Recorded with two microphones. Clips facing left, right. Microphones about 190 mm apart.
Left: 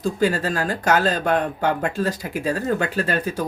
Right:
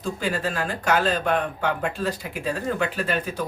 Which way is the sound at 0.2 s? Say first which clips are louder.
Left 6 dB; 40° left (ahead or behind).